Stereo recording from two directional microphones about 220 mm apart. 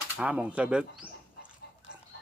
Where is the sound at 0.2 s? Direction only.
5° right (ahead or behind).